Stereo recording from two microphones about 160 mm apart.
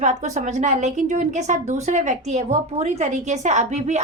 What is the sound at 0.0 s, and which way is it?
A woman's voice, 45° right (ahead or behind).